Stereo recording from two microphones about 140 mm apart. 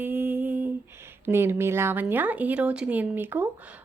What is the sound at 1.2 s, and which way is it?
A woman's voice, 15° right (ahead or behind).